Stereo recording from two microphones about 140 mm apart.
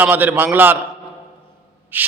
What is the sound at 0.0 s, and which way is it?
Speech, 15° right (ahead or behind).